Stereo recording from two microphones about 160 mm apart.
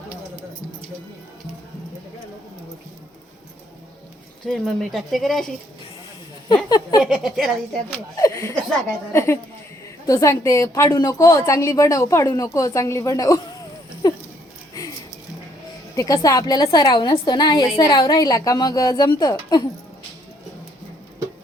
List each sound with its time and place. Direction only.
4.4 s speech: centre (ahead or behind)
6.7 s a sound: 25° left (ahead or behind)
7.0 s speech: centre (ahead or behind)
8.1 s a woman's voice: 20° left (ahead or behind)
16.0 s a woman's voice: 20° left (ahead or behind)